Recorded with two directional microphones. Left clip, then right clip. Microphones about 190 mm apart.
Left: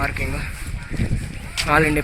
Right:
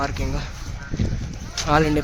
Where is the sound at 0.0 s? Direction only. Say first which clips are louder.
Left 2 dB; 15° right (ahead or behind).